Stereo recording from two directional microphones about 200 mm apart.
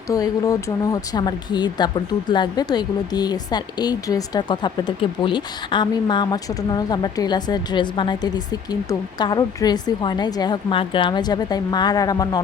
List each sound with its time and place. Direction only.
0.1 s speech: 15° left (ahead or behind)